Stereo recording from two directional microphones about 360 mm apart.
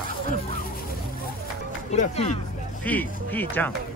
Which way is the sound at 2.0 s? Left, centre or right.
Centre.